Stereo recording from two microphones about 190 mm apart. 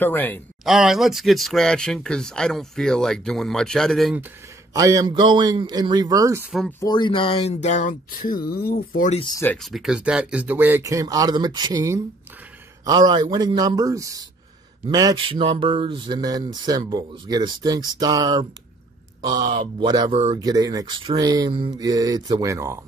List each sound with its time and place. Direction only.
0.0 s speech: 10° left (ahead or behind)
0.7 s speech: centre (ahead or behind)
4.7 s speech: 20° right (ahead or behind)
6.8 s speech: 25° left (ahead or behind); by 9.1 s 50° left (ahead or behind)
9.1 s speech: 25° left (ahead or behind)
9.4 s speech: 5° left (ahead or behind); by 20.1 s 25° right (ahead or behind)
20.1 s speech: 35° right (ahead or behind)
20.4 s speech: 20° right (ahead or behind)